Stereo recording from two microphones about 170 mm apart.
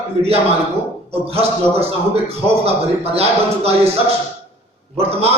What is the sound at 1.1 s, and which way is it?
A man's voice, 35° right (ahead or behind).